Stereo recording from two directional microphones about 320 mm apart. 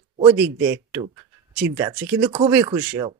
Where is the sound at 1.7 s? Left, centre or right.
Centre.